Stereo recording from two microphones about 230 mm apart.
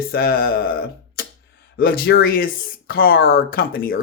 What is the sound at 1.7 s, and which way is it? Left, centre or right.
Speech, left.